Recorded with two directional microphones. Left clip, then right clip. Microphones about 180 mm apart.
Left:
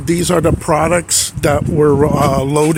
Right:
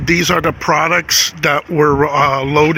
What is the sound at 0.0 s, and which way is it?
Speech, 20° left (ahead or behind).